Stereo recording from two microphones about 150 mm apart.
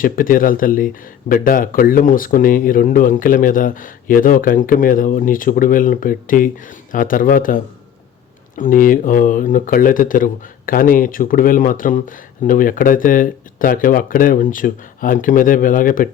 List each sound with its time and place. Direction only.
0.0 s speech: 65° left (ahead or behind)